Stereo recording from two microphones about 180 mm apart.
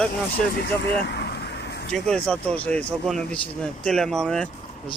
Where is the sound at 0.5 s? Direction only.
70° left (ahead or behind).